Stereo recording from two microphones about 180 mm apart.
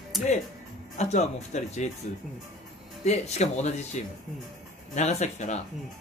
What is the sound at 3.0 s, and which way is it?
Speech, 40° left (ahead or behind).